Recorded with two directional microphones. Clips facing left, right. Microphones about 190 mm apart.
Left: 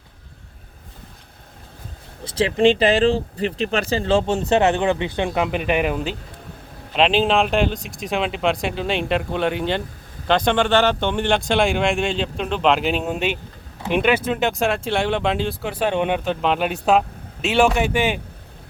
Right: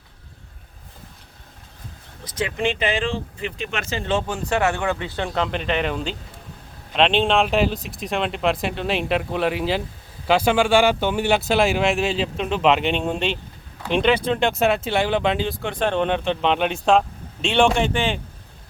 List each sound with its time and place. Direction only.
2.2 s speech: 30° left (ahead or behind); by 18.2 s 10° left (ahead or behind)